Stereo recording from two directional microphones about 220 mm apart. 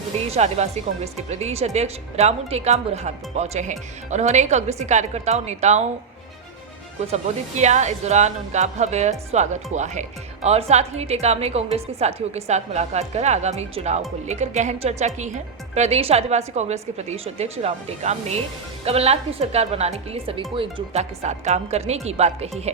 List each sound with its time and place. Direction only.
0.3 s speech: 30° right (ahead or behind)
7.1 s speech: 30° right (ahead or behind)